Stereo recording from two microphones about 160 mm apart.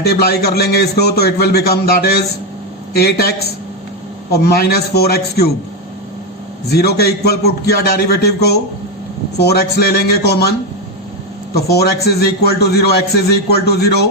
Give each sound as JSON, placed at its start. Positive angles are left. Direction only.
{"t": 0.0, "sound": "a man's voice", "side_deg": 80}
{"t": 6.7, "sound": "a man's voice", "side_deg": 85}
{"t": 11.5, "sound": "a man's voice", "side_deg": 80}